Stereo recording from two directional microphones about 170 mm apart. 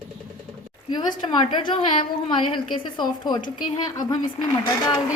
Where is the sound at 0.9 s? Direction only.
25° left (ahead or behind).